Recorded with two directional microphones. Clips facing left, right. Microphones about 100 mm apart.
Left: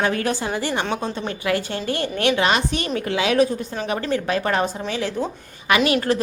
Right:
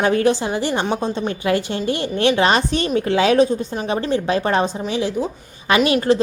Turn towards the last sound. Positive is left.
turn(degrees=-25)  # may be behind; listen again after turning